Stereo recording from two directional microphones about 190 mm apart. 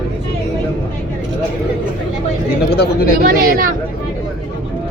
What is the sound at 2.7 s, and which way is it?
Speech, 60° left (ahead or behind).